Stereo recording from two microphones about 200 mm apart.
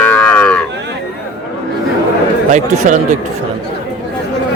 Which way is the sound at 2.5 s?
35° right (ahead or behind).